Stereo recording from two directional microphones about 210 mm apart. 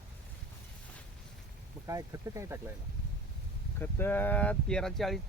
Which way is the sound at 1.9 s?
15° right (ahead or behind).